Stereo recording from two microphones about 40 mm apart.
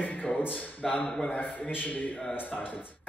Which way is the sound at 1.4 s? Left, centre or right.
Left.